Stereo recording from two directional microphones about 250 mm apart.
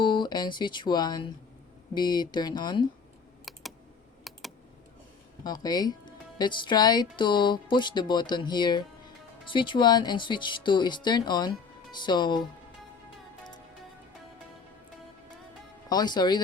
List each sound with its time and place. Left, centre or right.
0.0 s speech: centre
3.5 s typing: centre
4.3 s computer keyboard: centre
5.4 s speech: centre
15.9 s speech: centre